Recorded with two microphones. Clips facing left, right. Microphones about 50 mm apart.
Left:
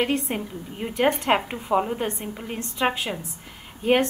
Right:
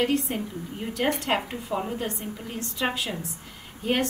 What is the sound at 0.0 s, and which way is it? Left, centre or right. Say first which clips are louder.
A woman's voice: left 1 dB; left.